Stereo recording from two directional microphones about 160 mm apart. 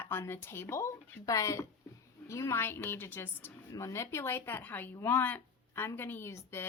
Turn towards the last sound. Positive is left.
turn(degrees=15)  # may be behind; listen again after turning